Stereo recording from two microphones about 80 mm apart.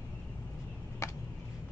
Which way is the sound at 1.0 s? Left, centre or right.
Left.